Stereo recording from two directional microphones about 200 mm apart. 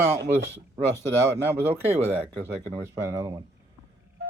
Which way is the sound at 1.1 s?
10° right (ahead or behind).